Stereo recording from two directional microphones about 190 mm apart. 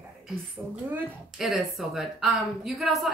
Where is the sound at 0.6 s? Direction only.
10° right (ahead or behind).